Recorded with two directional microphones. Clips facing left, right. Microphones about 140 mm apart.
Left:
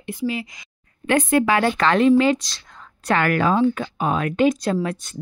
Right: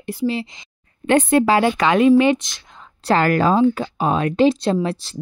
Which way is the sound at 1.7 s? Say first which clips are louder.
Right 2 dB; 10° right (ahead or behind).